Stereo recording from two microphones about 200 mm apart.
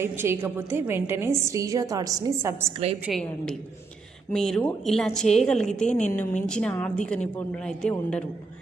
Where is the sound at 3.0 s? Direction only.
Centre (ahead or behind).